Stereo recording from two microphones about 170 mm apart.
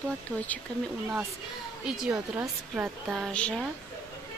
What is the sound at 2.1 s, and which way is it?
A woman's voice, 15° right (ahead or behind).